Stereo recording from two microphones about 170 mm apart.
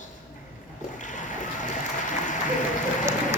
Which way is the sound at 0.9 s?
50° left (ahead or behind).